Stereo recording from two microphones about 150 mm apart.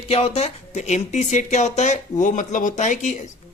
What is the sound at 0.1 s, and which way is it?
Speech, 45° left (ahead or behind).